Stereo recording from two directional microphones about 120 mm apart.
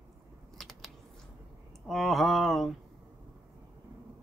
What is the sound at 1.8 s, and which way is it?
Speech, centre (ahead or behind).